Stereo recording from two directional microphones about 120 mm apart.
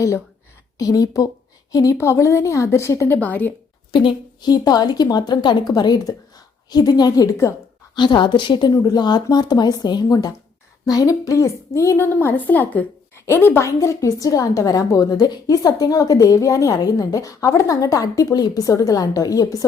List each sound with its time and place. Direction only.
0.8 s a woman's voice: 30° left (ahead or behind)
3.2 s a woman's voice: 15° left (ahead or behind)
3.9 s a woman's voice: 40° left (ahead or behind)